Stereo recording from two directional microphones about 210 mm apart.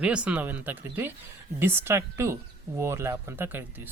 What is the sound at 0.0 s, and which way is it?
Speech, 5° right (ahead or behind).